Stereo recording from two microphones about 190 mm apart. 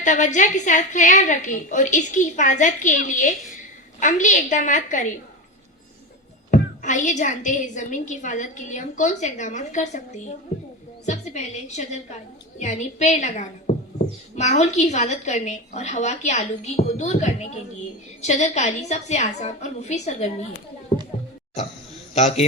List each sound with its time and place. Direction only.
0.0 s a woman's voice: 40° left (ahead or behind)
6.5 s a woman's voice: 40° left (ahead or behind)
22.1 s a man's voice: 35° left (ahead or behind)